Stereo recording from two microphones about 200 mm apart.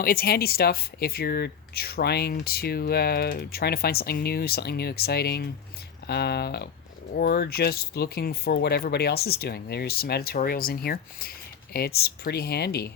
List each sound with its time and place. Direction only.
0.0 s speech: 50° left (ahead or behind)